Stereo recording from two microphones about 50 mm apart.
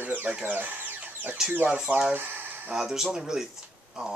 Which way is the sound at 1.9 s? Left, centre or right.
Right.